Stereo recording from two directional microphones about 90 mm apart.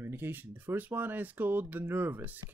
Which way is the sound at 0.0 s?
25° right (ahead or behind).